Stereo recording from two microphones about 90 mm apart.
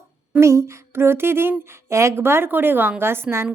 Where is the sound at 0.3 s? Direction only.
30° right (ahead or behind).